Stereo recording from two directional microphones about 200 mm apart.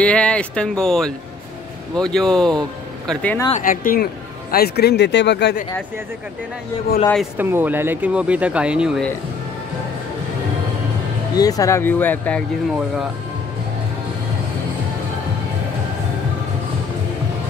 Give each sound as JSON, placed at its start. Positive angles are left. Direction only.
{"t": 0.0, "sound": "speech", "side_deg": 5}
{"t": 3.6, "sound": "speech", "side_deg": 45}
{"t": 7.3, "sound": "speech", "side_deg": -10}
{"t": 11.3, "sound": "speech", "side_deg": 20}
{"t": 12.7, "sound": "speech", "side_deg": 0}